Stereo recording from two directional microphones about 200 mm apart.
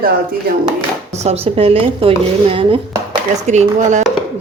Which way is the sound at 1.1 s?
30° right (ahead or behind).